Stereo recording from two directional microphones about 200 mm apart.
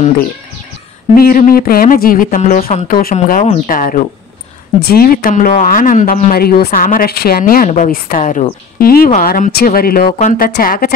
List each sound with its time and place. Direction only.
1.1 s speech: 45° left (ahead or behind)